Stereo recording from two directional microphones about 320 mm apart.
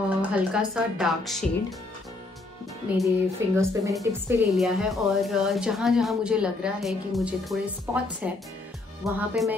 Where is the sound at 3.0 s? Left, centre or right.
Centre.